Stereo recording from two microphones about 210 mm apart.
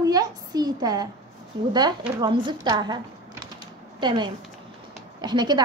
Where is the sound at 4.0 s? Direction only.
20° right (ahead or behind).